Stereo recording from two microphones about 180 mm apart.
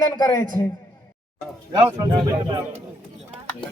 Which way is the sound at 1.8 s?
30° right (ahead or behind).